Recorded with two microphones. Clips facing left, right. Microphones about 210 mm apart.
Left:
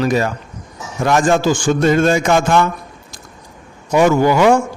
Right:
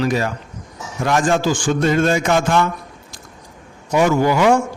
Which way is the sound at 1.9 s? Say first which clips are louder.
Left 2 dB; 45° left (ahead or behind).